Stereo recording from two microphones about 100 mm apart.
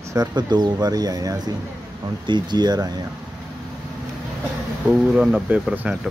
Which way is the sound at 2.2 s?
50° right (ahead or behind).